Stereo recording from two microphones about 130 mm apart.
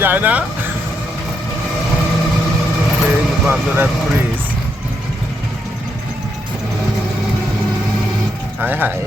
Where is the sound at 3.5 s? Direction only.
15° right (ahead or behind).